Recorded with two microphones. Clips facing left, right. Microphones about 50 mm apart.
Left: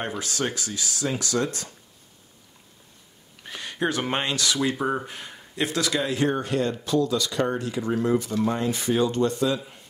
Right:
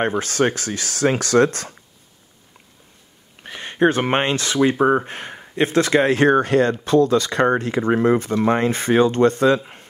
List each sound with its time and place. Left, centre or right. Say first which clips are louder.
0.2 s speech: right 9 dB; right
3.4 s speech: right 9 dB; right